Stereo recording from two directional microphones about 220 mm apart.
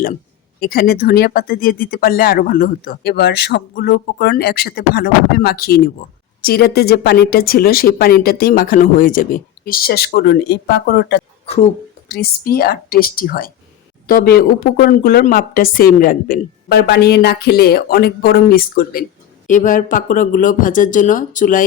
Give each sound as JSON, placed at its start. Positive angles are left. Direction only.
{"t": 0.6, "sound": "speech", "side_deg": 45}